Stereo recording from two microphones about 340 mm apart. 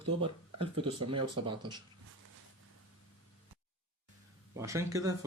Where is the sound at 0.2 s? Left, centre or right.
Centre.